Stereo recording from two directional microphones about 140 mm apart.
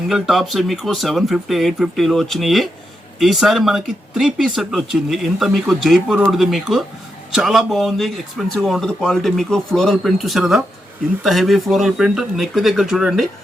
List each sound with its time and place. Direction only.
0.1 s speech: centre (ahead or behind)